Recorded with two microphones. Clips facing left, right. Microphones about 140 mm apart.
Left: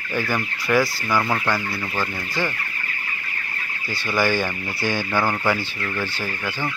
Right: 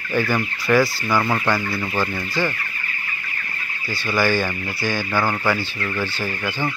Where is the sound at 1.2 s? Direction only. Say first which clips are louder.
Right 2 dB; 5° right (ahead or behind).